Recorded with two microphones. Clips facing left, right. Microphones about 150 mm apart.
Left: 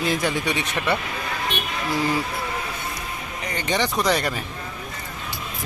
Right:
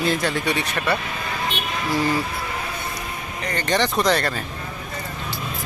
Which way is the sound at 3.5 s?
10° left (ahead or behind).